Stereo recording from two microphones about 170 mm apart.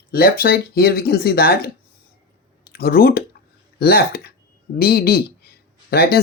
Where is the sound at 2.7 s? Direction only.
65° left (ahead or behind).